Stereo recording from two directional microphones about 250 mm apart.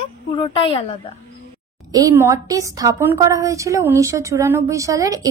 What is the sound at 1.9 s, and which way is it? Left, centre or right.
A woman's voice, centre.